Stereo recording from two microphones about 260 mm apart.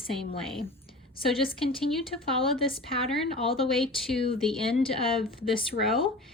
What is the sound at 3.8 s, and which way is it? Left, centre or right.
Speech, centre.